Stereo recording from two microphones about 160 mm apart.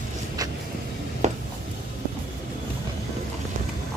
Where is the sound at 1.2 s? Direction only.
45° right (ahead or behind).